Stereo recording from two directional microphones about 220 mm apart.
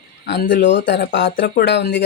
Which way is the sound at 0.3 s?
45° left (ahead or behind).